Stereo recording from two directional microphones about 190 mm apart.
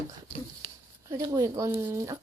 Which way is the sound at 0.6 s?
20° right (ahead or behind).